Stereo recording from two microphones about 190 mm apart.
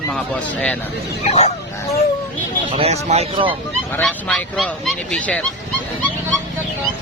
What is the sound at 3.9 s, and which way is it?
Speech, 10° left (ahead or behind).